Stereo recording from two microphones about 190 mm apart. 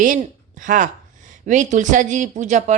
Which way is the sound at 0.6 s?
45° right (ahead or behind).